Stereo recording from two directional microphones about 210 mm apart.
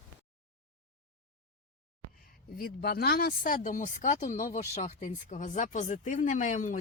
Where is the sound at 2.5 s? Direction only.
45° left (ahead or behind).